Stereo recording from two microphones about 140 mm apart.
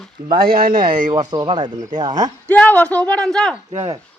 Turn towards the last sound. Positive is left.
turn(degrees=-40)  # may be behind; listen again after turning